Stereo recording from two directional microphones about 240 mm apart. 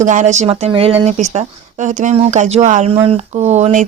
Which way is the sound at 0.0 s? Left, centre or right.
Right.